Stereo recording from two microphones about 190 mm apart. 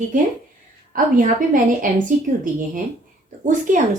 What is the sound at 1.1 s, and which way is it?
Speech, 45° right (ahead or behind).